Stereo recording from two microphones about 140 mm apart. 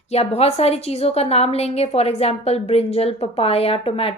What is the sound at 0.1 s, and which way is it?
A woman's voice, 50° left (ahead or behind).